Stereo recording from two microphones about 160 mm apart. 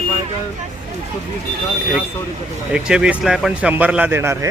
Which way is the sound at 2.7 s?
5° right (ahead or behind).